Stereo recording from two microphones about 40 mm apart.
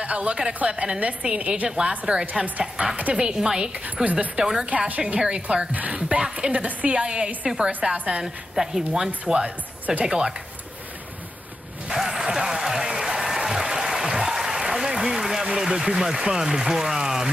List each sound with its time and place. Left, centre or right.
0.0 s a woman's voice: right
3.7 s a woman's voice: right
4.4 s a woman's voice: centre
4.6 s a woman's voice: right
5.7 s a woman's voice: right
5.9 s a woman's voice: right
9.3 s speech: right
10.0 s speech: centre
11.9 s applause: centre
16.3 s speech: centre